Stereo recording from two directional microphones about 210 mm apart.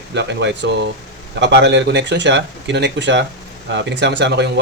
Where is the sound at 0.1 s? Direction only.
55° right (ahead or behind).